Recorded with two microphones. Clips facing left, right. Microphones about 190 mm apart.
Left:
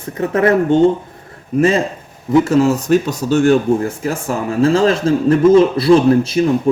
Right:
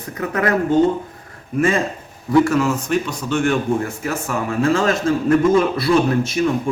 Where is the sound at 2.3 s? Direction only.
25° left (ahead or behind).